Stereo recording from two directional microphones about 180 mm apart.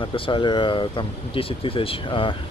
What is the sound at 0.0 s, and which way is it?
Speech, 30° left (ahead or behind).